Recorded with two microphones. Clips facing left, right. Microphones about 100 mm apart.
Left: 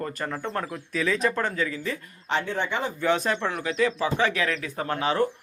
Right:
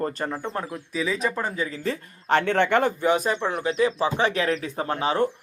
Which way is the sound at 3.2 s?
5° right (ahead or behind).